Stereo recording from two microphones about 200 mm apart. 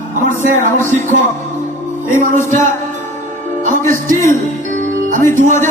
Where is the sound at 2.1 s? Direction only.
40° right (ahead or behind).